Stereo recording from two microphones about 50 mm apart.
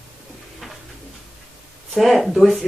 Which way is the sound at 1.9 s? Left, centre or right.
Centre.